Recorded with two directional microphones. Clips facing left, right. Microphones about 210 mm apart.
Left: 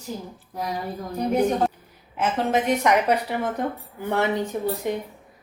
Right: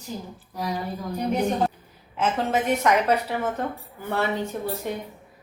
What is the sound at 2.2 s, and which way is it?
A woman's voice, 10° left (ahead or behind).